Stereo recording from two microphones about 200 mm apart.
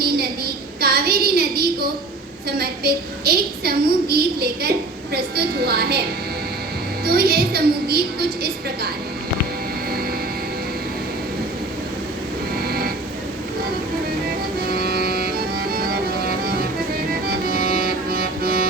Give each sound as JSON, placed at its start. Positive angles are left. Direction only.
{"t": 0.0, "sound": "a sound", "side_deg": -50}
{"t": 2.5, "sound": "a woman's voice", "side_deg": -50}
{"t": 7.0, "sound": "a woman's voice", "side_deg": -50}
{"t": 12.5, "sound": "music", "side_deg": -50}
{"t": 14.3, "sound": "music", "side_deg": -50}